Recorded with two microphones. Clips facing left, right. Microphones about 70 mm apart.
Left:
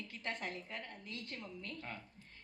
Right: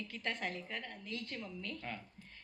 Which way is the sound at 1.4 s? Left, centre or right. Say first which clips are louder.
Right 3 dB; left.